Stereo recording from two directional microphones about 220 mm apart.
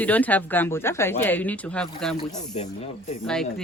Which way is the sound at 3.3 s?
Centre (ahead or behind).